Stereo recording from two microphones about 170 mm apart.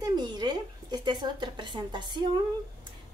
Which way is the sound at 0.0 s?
25° right (ahead or behind).